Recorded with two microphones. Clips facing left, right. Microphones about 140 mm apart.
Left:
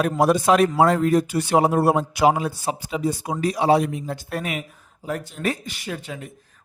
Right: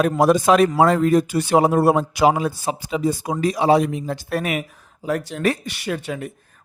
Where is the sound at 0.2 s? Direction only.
90° right; by 4.6 s 75° right (ahead or behind).